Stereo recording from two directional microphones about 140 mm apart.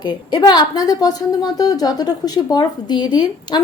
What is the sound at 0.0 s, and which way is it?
A woman's voice, 30° left (ahead or behind).